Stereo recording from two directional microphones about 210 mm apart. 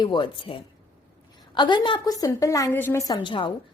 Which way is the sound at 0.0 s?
20° left (ahead or behind).